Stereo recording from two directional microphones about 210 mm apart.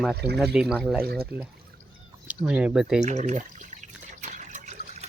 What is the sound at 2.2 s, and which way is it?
Speech, 5° right (ahead or behind).